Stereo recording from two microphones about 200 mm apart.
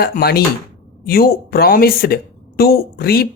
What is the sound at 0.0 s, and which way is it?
Speech, 50° left (ahead or behind).